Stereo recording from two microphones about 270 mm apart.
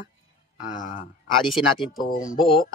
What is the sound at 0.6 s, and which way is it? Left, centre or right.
Speech, left.